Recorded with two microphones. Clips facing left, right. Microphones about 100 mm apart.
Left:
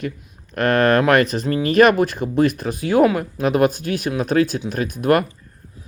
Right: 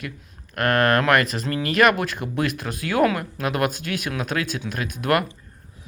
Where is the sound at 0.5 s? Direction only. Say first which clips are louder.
Left 4 dB; 25° left (ahead or behind).